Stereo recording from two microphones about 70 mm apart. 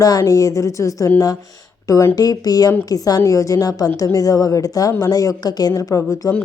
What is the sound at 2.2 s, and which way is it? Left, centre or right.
A woman's voice, left.